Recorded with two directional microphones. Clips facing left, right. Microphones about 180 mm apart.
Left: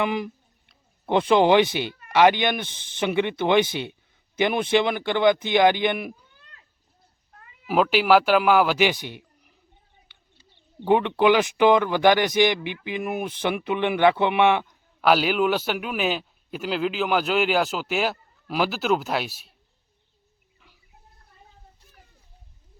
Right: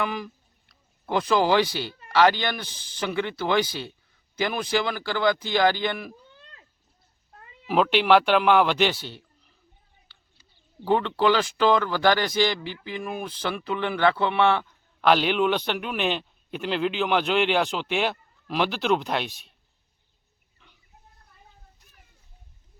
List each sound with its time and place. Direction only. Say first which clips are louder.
0.0 s speech: left 4 dB; 20° left (ahead or behind)
7.7 s a man's voice: left 1 dB; 5° left (ahead or behind)
10.8 s speech: left 3 dB; 15° left (ahead or behind)
15.0 s a man's voice: left 1 dB; 5° left (ahead or behind)